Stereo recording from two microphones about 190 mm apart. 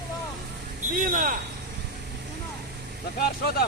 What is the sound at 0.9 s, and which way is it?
Speech, 45° right (ahead or behind).